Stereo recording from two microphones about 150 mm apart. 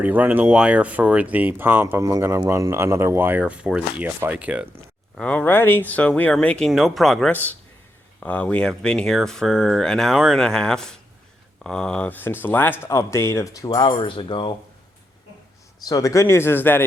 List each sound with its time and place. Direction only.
0.0 s speech: 10° right (ahead or behind)
5.1 s speech: 10° left (ahead or behind); by 14.5 s 35° left (ahead or behind)
15.9 s speech: 20° left (ahead or behind)